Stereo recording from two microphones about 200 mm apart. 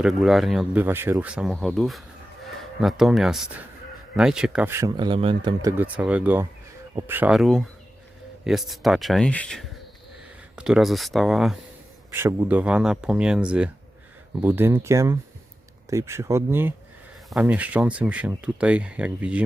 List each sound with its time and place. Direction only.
0.0 s speech: centre (ahead or behind); by 5.7 s 25° right (ahead or behind)
5.7 s speech: 5° right (ahead or behind)
12.1 s speech: 10° right (ahead or behind)